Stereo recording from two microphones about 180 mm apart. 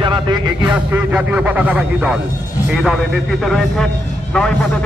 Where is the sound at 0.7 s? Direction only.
10° right (ahead or behind).